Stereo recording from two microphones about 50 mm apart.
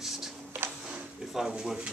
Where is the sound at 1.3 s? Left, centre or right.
Centre.